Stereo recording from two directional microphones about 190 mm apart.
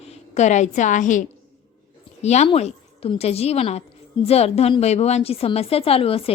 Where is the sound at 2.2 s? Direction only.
35° left (ahead or behind).